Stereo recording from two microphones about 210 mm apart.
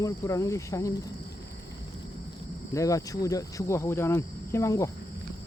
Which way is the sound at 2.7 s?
15° left (ahead or behind).